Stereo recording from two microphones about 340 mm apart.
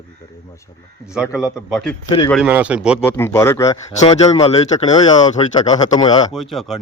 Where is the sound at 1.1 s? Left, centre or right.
Centre.